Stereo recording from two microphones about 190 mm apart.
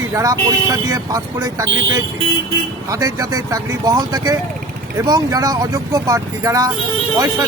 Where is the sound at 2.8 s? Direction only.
20° right (ahead or behind).